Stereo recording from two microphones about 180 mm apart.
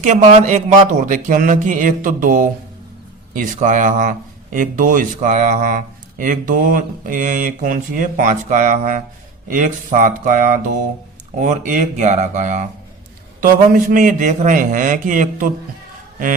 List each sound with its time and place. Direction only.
0.0 s speech: 40° right (ahead or behind)